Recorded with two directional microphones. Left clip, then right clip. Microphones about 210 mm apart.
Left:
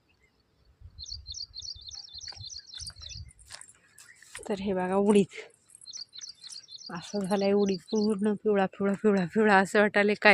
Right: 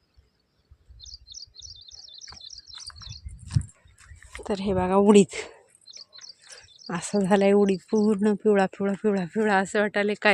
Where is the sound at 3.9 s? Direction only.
Centre (ahead or behind).